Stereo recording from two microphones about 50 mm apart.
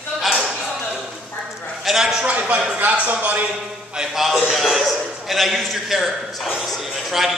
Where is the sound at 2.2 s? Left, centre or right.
Right.